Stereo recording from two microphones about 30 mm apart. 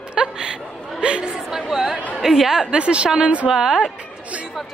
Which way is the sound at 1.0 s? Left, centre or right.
Right.